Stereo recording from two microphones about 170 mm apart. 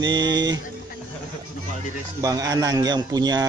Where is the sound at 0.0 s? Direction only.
25° right (ahead or behind).